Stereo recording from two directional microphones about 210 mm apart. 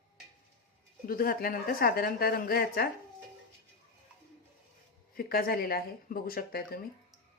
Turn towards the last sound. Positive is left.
turn(degrees=45)  # may be behind; listen again after turning